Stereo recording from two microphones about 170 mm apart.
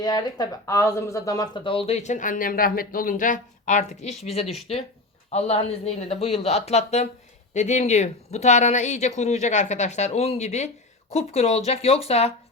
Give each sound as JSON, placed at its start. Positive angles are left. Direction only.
{"t": 0.0, "sound": "speech", "side_deg": 25}